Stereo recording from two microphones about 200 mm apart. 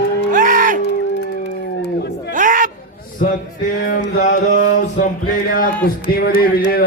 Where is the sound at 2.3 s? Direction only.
40° right (ahead or behind).